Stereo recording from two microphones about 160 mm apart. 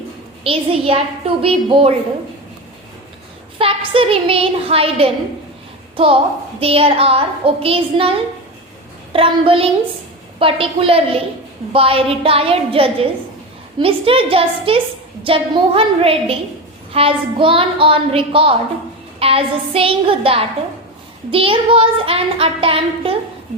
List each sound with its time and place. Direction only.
0.4 s child singing: 35° right (ahead or behind)
3.6 s child singing: 35° right (ahead or behind)
6.6 s child singing: 35° right (ahead or behind)